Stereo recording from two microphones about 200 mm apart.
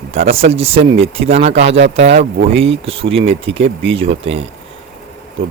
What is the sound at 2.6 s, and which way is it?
Speech, 30° right (ahead or behind).